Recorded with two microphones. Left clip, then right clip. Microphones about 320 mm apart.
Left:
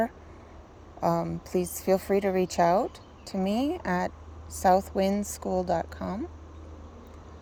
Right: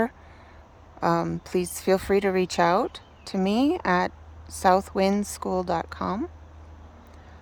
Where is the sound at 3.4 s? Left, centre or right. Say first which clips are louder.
Right 5 dB; right.